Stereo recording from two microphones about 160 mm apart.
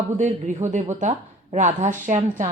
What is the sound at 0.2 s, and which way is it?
A woman's voice, 50° right (ahead or behind).